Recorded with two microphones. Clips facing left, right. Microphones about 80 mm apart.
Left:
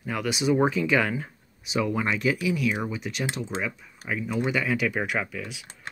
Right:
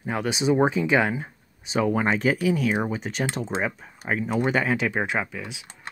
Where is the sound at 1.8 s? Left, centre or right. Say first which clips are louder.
Right 3 dB; right.